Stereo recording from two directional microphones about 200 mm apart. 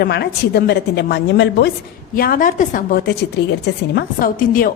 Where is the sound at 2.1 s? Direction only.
45° left (ahead or behind).